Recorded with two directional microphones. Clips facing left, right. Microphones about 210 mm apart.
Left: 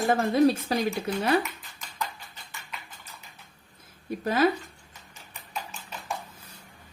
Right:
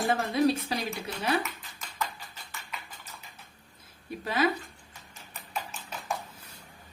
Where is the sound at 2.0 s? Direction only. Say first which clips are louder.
Even; centre (ahead or behind).